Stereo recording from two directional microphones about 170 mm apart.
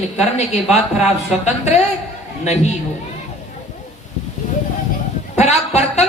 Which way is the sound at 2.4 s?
40° left (ahead or behind).